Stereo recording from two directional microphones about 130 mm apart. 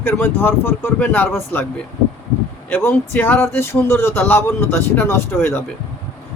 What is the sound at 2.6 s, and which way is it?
Speech, 15° left (ahead or behind).